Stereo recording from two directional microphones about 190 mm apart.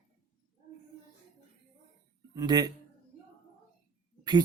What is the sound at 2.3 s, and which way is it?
Speech, 20° right (ahead or behind).